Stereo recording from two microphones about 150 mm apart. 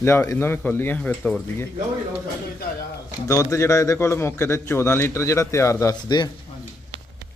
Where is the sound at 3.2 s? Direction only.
20° left (ahead or behind).